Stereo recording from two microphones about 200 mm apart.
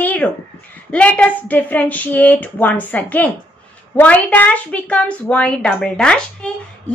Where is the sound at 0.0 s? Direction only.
10° left (ahead or behind).